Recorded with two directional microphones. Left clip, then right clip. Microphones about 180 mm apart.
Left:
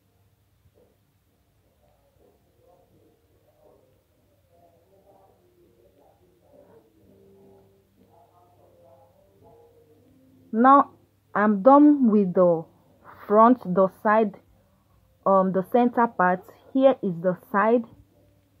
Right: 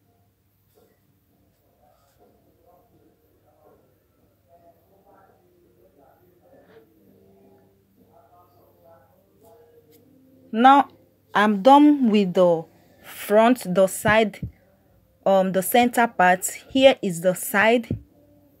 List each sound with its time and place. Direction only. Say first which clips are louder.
10.5 s speech: right 2 dB; 30° right (ahead or behind)